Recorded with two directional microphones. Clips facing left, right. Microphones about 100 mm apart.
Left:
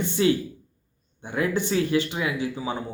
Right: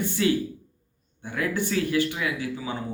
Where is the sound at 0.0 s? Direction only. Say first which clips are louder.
Left 2 dB; 20° left (ahead or behind).